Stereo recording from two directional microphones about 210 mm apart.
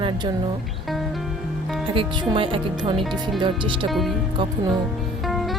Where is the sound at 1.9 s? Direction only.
25° right (ahead or behind).